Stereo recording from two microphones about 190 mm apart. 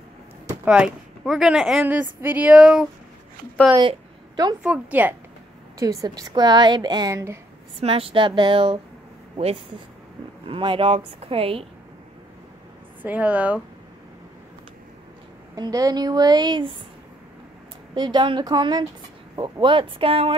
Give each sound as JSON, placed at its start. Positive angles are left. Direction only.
{"t": 0.7, "sound": "a woman's voice", "side_deg": -5}
{"t": 4.6, "sound": "a woman's voice", "side_deg": -10}
{"t": 7.8, "sound": "a woman's voice", "side_deg": -30}
{"t": 10.4, "sound": "a woman's voice", "side_deg": -25}
{"t": 13.0, "sound": "speech", "side_deg": -10}
{"t": 15.5, "sound": "a woman's voice", "side_deg": -20}
{"t": 17.9, "sound": "a woman's voice", "side_deg": -25}